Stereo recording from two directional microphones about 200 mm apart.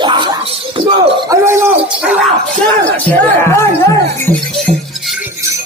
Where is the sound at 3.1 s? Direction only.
10° left (ahead or behind).